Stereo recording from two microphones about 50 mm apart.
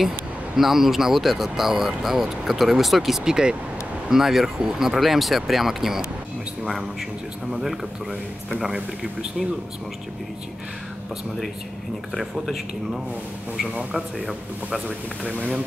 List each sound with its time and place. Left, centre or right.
0.6 s speech: centre
3.3 s speech: centre
12.1 s speech: centre